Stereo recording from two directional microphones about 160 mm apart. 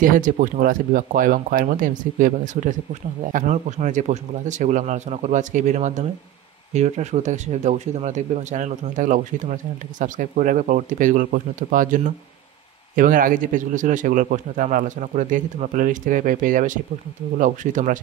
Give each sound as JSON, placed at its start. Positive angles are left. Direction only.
{"t": 0.0, "sound": "a man's voice", "side_deg": -55}